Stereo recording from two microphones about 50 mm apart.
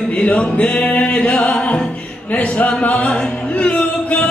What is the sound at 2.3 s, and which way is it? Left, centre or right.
Singing, left.